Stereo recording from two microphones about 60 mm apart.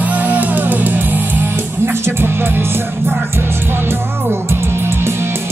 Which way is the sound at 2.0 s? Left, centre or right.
Right.